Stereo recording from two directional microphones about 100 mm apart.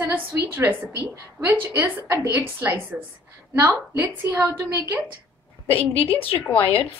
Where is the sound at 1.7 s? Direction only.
15° right (ahead or behind).